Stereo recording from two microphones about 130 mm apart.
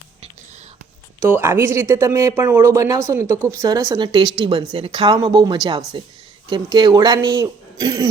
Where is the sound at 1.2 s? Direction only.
15° right (ahead or behind).